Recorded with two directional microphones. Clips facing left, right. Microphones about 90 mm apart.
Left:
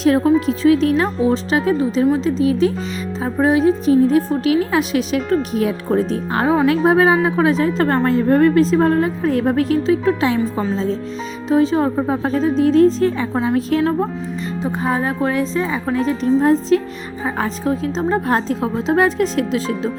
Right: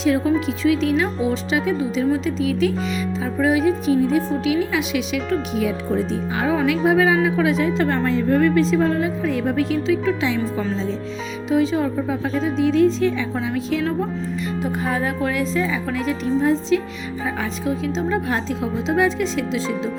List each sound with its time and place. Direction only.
0.0 s a woman's voice: 50° left (ahead or behind)
6.4 s a woman's voice: 35° left (ahead or behind)
11.4 s a woman's voice: 35° left (ahead or behind)
14.6 s a woman's voice: 30° left (ahead or behind)
16.4 s a woman's voice: 45° left (ahead or behind)